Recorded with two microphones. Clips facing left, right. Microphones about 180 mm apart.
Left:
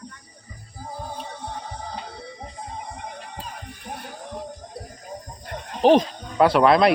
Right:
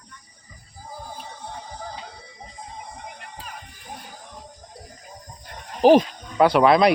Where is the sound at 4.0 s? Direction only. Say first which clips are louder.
Left 7 dB; 65° left (ahead or behind).